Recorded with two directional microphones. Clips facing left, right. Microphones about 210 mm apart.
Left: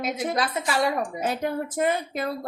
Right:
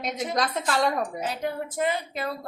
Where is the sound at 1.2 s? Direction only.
50° left (ahead or behind).